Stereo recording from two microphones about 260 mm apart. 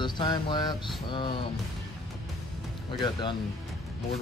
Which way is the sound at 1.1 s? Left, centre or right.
Centre.